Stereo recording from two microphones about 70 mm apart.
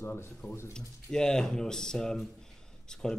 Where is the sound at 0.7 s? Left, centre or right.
Centre.